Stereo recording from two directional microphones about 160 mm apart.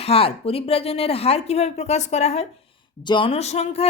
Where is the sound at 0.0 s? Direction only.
35° left (ahead or behind).